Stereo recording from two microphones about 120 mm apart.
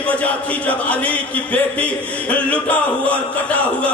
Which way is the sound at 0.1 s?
10° left (ahead or behind).